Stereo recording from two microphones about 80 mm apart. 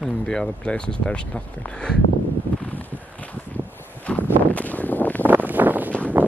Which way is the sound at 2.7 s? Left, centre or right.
Left.